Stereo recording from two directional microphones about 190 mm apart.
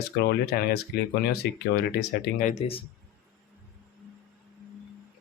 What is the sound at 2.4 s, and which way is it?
Speech, 35° left (ahead or behind).